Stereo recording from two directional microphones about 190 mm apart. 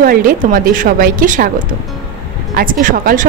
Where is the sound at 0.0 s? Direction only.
50° right (ahead or behind).